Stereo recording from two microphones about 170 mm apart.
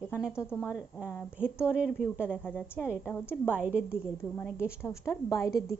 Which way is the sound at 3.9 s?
15° left (ahead or behind).